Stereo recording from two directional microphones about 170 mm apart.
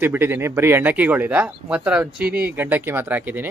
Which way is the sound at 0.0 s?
10° right (ahead or behind).